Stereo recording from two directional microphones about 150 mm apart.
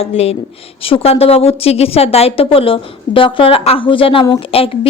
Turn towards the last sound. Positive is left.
turn(degrees=40)  # may be behind; listen again after turning